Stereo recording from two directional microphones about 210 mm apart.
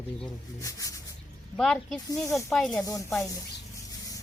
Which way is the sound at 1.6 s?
5° left (ahead or behind).